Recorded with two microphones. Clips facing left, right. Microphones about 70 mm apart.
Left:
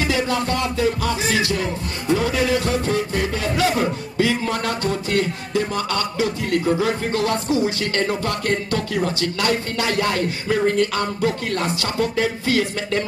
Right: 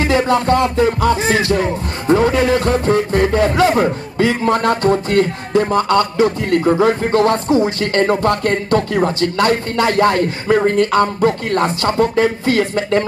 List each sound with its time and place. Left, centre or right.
0.0 s music: right